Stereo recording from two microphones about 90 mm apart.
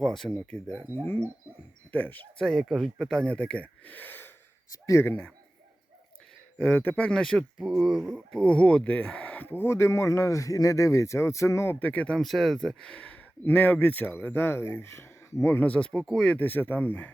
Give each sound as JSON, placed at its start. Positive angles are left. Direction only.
{"t": 0.0, "sound": "speech", "side_deg": 5}
{"t": 0.7, "sound": "speech", "side_deg": -30}
{"t": 1.9, "sound": "speech", "side_deg": 20}
{"t": 2.4, "sound": "speech", "side_deg": 0}
{"t": 4.7, "sound": "speech", "side_deg": 35}
{"t": 5.0, "sound": "speech", "side_deg": 20}
{"t": 6.6, "sound": "speech", "side_deg": 20}
{"t": 7.6, "sound": "speech", "side_deg": -5}
{"t": 8.4, "sound": "speech", "side_deg": 10}
{"t": 12.2, "sound": "speech", "side_deg": 0}